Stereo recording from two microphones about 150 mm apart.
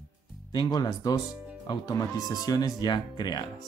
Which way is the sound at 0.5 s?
30° left (ahead or behind).